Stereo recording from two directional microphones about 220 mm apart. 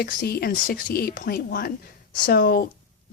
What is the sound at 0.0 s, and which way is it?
Speech, 45° left (ahead or behind).